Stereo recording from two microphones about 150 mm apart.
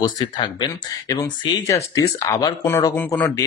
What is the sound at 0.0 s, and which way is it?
Speech, 30° left (ahead or behind).